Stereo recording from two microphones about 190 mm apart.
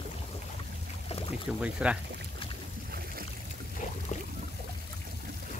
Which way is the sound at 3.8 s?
40° left (ahead or behind).